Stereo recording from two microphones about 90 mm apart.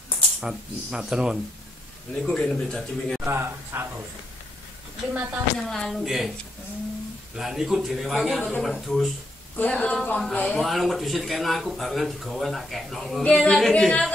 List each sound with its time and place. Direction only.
0.4 s speech: 10° right (ahead or behind)
2.2 s speech: 10° left (ahead or behind)
3.3 s speech: 25° right (ahead or behind)
5.1 s speech: 15° right (ahead or behind)
5.6 s speech: 5° left (ahead or behind)
7.3 s speech: 5° right (ahead or behind)
9.6 s speech: 10° left (ahead or behind)
10.6 s speech: centre (ahead or behind)